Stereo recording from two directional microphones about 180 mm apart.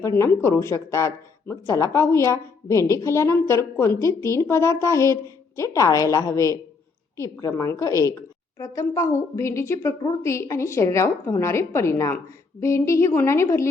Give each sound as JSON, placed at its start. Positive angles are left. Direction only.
{"t": 0.2, "sound": "speech", "side_deg": 15}